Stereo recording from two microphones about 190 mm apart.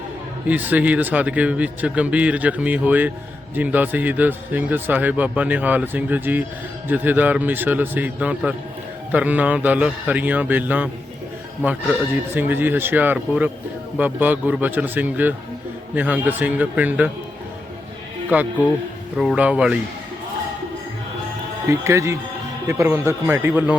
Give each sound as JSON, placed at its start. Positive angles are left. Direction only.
{"t": 0.4, "sound": "a man's voice", "side_deg": -10}
{"t": 18.3, "sound": "a man's voice", "side_deg": -10}
{"t": 21.7, "sound": "a man's voice", "side_deg": -15}